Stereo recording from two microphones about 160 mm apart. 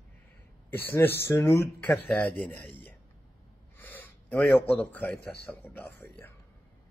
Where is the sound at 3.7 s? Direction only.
10° left (ahead or behind).